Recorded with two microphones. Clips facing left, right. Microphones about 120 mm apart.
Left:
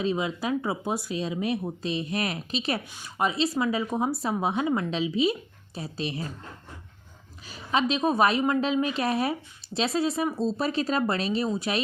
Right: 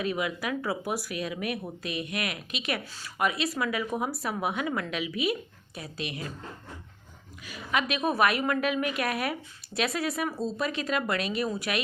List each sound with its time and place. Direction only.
0.0 s a woman's voice: 25° left (ahead or behind)
7.4 s a woman's voice: 30° left (ahead or behind)